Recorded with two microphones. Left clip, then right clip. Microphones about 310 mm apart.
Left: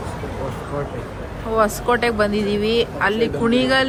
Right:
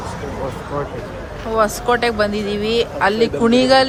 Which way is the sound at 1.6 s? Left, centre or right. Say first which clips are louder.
Right 2 dB; centre.